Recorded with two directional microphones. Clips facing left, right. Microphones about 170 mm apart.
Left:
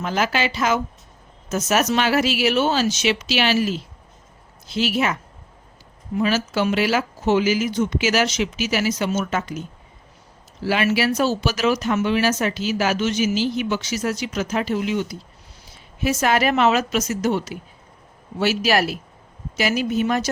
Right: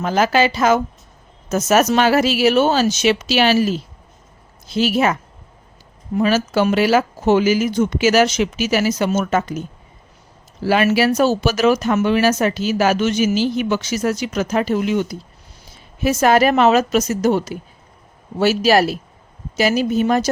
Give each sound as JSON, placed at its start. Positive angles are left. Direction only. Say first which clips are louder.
{"t": 0.0, "sound": "speech", "louder": "right 6 dB", "side_deg": -40}
{"t": 6.1, "sound": "speech", "louder": "right 4 dB", "side_deg": -45}